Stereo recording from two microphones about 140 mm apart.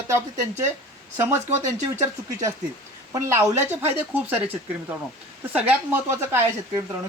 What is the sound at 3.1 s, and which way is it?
Speech, 20° right (ahead or behind).